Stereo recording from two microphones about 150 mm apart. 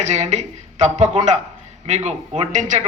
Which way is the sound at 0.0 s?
50° right (ahead or behind).